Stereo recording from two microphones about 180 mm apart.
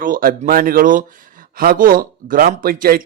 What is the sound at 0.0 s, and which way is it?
Speech, 50° right (ahead or behind).